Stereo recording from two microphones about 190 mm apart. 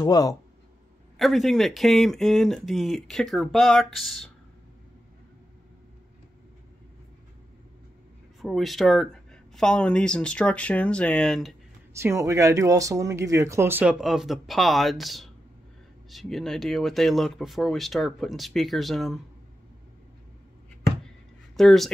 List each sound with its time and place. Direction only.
0.0 s speech: 20° left (ahead or behind)
1.1 s speech: centre (ahead or behind)
8.4 s speech: centre (ahead or behind)
11.9 s speech: 15° right (ahead or behind)
21.5 s speech: centre (ahead or behind)